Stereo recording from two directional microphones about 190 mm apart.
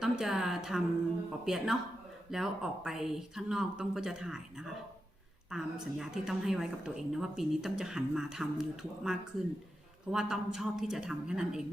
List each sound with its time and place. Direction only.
0.0 s a woman's voice: 5° right (ahead or behind)